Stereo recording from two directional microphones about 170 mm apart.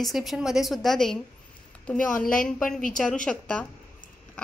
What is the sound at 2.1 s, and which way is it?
Speech, 55° left (ahead or behind).